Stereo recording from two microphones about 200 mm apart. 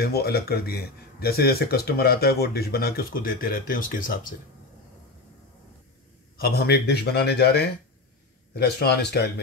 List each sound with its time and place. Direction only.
0.0 s speech: 50° left (ahead or behind)
6.3 s speech: 50° left (ahead or behind)